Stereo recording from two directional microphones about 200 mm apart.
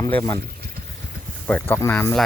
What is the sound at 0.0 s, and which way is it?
Speech, 15° left (ahead or behind).